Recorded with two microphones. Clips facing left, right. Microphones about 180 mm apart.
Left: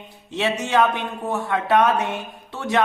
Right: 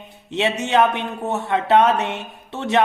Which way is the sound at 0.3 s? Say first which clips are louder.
Right 2 dB; 20° right (ahead or behind).